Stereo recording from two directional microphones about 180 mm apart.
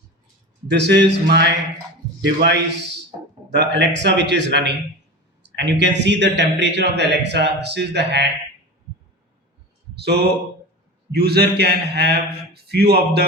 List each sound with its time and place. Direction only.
0.7 s a man's voice: 70° right (ahead or behind)
9.9 s a sound: 65° right (ahead or behind)
11.1 s a man's voice: 60° right (ahead or behind)